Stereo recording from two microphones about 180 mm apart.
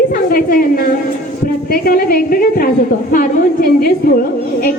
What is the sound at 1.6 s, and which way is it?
A woman's voice, 55° left (ahead or behind).